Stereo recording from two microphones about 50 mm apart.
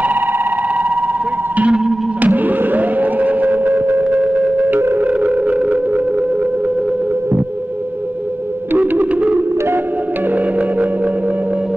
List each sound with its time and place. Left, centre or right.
0.0 s a sound: right
2.2 s fireworks: right
4.0 s a sound: right
4.6 s music: right
5.0 s music: right
8.7 s music: right